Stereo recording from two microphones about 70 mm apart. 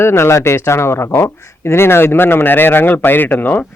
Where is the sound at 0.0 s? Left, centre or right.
Left.